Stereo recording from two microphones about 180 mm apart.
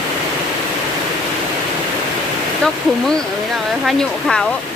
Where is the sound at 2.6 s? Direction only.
5° left (ahead or behind).